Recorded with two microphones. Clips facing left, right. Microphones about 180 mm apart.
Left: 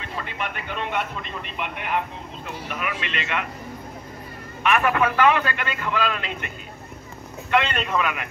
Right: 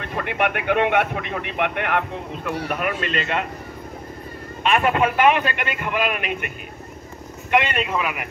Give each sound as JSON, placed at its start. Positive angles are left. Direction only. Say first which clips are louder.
{"t": 0.0, "sound": "speech", "louder": "right 8 dB", "side_deg": -60}
{"t": 2.8, "sound": "speech", "louder": "right 5 dB", "side_deg": -40}
{"t": 4.6, "sound": "speech", "louder": "right 2 dB", "side_deg": -25}
{"t": 7.5, "sound": "a man's voice", "louder": "right 1 dB", "side_deg": -10}